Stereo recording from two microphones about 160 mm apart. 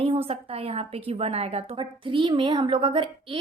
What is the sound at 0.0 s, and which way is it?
A woman's voice, 35° right (ahead or behind).